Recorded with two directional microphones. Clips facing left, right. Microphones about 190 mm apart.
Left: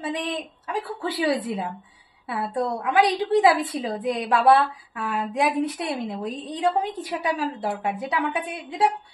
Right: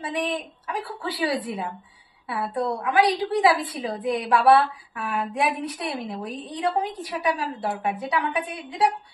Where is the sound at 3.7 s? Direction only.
25° left (ahead or behind).